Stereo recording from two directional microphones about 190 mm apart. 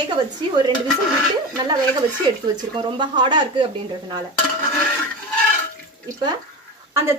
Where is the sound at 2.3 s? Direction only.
25° right (ahead or behind).